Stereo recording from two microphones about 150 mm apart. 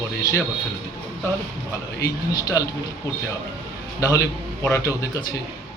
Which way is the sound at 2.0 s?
25° left (ahead or behind).